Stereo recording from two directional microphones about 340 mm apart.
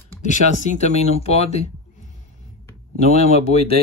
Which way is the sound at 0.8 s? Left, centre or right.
Centre.